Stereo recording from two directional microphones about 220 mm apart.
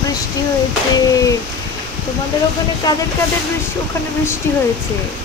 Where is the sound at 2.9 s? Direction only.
20° left (ahead or behind).